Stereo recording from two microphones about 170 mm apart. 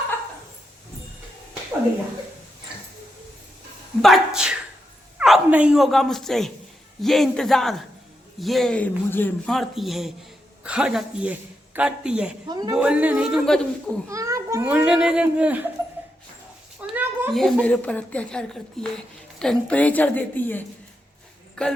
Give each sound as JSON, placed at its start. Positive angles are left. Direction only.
{"t": 4.0, "sound": "speech", "side_deg": 0}
{"t": 12.5, "sound": "speech", "side_deg": -25}
{"t": 12.7, "sound": "speech", "side_deg": -5}
{"t": 14.1, "sound": "speech", "side_deg": -15}
{"t": 14.7, "sound": "speech", "side_deg": -5}
{"t": 16.8, "sound": "a sound", "side_deg": -10}
{"t": 17.3, "sound": "speech", "side_deg": 5}